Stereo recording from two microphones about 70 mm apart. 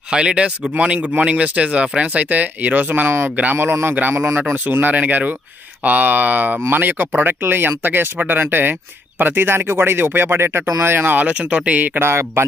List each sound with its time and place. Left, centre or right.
0.1 s speech: centre; by 12.4 s right